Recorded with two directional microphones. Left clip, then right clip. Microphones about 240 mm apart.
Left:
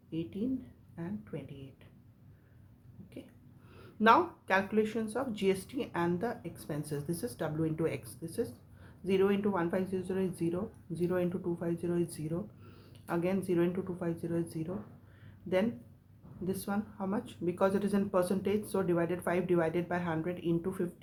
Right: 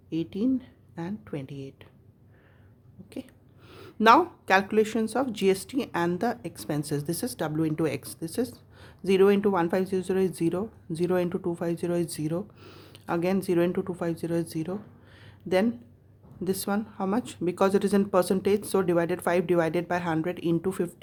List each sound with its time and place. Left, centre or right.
0.1 s speech: right
3.7 s speech: right
15.2 s a sound: right
16.4 s speech: right